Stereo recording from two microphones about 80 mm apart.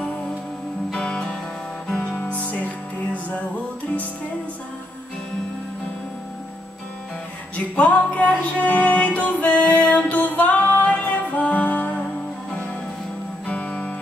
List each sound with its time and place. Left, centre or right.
0.9 s music: centre
7.5 s music: centre